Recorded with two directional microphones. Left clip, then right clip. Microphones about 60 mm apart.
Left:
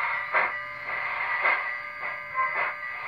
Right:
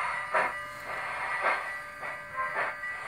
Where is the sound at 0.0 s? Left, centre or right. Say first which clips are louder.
Left 3 dB; centre.